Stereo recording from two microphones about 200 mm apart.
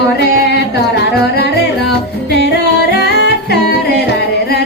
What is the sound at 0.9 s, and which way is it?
Music, 55° left (ahead or behind).